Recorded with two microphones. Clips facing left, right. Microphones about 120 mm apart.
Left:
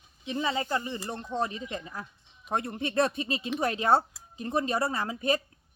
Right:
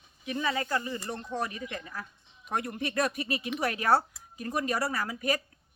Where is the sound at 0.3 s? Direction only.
25° left (ahead or behind).